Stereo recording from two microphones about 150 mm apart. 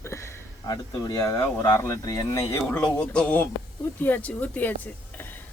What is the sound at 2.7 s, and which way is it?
Speech, 5° left (ahead or behind).